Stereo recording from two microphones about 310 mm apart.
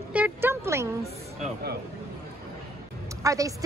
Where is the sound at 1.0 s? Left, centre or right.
Right.